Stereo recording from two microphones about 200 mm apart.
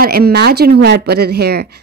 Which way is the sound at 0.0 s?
50° right (ahead or behind).